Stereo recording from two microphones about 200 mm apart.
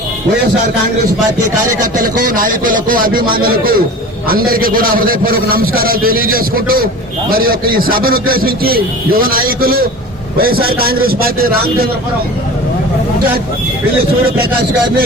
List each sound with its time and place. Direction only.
2.0 s a man's voice: 45° right (ahead or behind)